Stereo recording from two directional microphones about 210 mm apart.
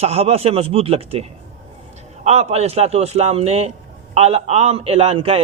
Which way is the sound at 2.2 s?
30° right (ahead or behind).